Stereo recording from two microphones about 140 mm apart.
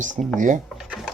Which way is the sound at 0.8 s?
5° right (ahead or behind).